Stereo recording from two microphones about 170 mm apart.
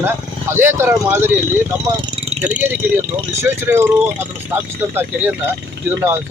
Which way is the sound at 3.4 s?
15° right (ahead or behind).